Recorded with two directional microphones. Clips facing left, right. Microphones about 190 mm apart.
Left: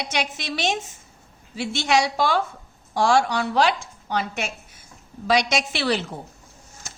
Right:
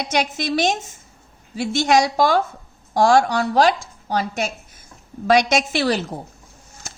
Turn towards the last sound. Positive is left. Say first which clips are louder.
# right 4 dB
turn(degrees=-45)  # may be behind; listen again after turning